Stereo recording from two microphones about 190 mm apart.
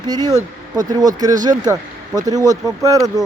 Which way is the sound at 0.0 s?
20° right (ahead or behind).